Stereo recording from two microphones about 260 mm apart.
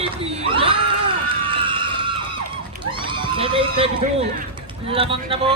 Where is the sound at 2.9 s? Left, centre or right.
Centre.